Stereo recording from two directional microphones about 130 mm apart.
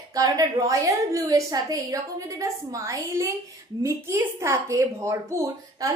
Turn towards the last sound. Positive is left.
turn(degrees=-25)  # may be behind; listen again after turning